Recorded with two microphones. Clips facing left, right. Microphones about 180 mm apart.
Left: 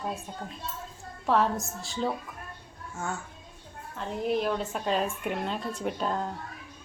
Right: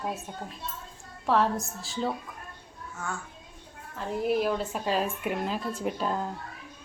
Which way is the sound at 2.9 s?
25° left (ahead or behind).